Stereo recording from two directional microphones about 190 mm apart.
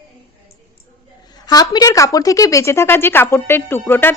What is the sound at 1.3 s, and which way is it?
Speech, 20° left (ahead or behind).